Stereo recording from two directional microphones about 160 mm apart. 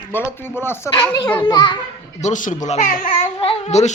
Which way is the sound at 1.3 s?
30° left (ahead or behind).